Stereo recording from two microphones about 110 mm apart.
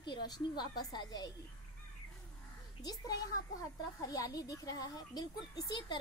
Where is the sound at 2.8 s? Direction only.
35° left (ahead or behind).